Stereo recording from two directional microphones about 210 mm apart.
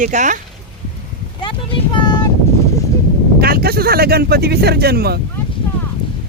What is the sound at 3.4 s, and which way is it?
Speech, 45° right (ahead or behind).